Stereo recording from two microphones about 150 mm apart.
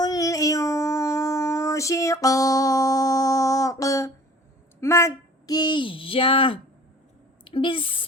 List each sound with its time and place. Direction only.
0.0 s child singing: 25° left (ahead or behind)
4.8 s a woman's voice: 20° left (ahead or behind); by 8.0 s 35° left (ahead or behind)